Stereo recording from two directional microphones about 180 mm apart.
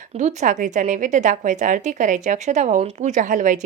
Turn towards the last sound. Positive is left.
turn(degrees=-45)  # may be behind; listen again after turning